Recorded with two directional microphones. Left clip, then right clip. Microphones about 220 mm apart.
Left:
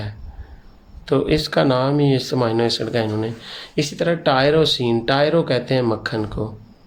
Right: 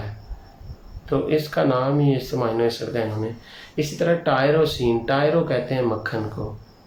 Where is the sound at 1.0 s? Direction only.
45° left (ahead or behind).